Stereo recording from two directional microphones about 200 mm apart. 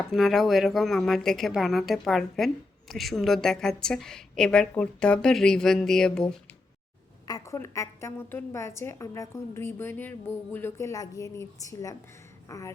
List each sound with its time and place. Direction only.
0.1 s a woman's voice: centre (ahead or behind)
7.3 s a woman's voice: 15° left (ahead or behind)